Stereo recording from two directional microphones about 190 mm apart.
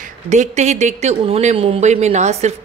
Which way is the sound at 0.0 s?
40° right (ahead or behind).